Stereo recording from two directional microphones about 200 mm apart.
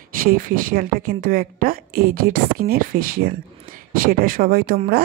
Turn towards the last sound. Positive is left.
turn(degrees=-45)  # may be behind; listen again after turning